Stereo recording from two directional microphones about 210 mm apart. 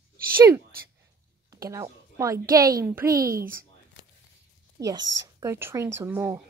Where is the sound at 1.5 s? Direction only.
15° right (ahead or behind).